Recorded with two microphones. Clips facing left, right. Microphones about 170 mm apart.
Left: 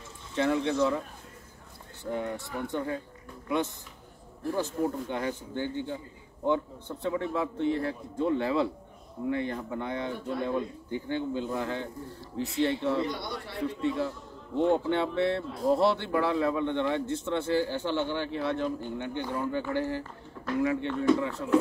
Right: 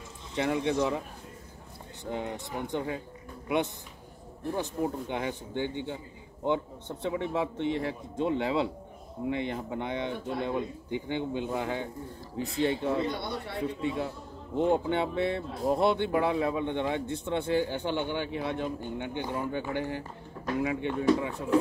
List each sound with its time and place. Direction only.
0.3 s a man's voice: 15° right (ahead or behind)
2.0 s a man's voice: 20° right (ahead or behind)